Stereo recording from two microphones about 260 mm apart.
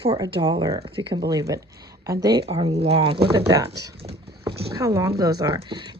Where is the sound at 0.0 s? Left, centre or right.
Right.